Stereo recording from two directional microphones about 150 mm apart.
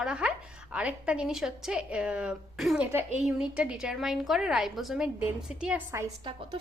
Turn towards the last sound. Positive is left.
turn(degrees=-35)  # may be behind; listen again after turning